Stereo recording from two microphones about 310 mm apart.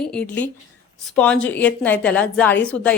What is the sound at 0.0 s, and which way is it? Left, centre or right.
A woman's voice, centre.